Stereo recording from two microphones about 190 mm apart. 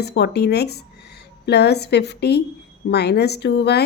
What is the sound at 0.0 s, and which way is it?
A woman's voice, 60° left (ahead or behind).